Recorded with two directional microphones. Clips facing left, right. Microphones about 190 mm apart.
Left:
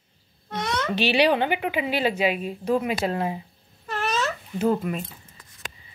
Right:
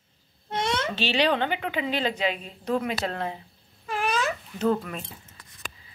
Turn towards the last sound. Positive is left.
turn(degrees=5)  # may be behind; listen again after turning